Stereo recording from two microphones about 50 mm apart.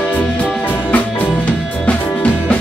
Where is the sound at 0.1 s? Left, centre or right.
Left.